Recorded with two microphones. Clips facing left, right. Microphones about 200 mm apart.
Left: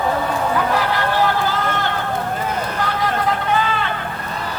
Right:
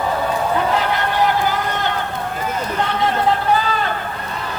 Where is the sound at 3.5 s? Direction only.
40° right (ahead or behind).